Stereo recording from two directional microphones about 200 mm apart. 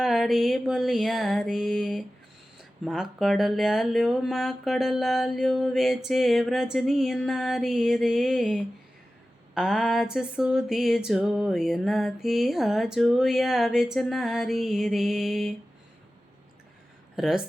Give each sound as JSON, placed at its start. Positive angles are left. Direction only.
{"t": 0.0, "sound": "speech", "side_deg": 0}
{"t": 17.2, "sound": "speech", "side_deg": 0}